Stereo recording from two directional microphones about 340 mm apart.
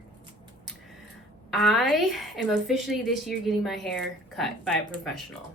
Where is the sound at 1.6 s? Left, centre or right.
Centre.